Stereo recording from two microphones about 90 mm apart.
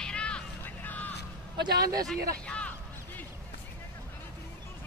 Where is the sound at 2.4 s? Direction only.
15° left (ahead or behind).